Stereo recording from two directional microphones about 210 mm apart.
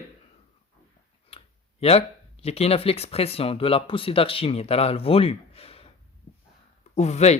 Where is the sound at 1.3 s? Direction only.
25° left (ahead or behind).